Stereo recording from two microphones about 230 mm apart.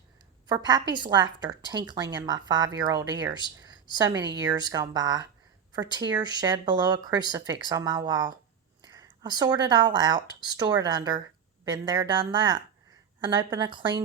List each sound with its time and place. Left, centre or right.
0.4 s a woman's voice: centre